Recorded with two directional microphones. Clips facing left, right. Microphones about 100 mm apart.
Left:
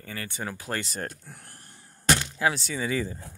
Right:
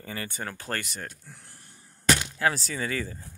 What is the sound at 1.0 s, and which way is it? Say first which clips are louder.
Speech: left 5 dB; 45° left (ahead or behind).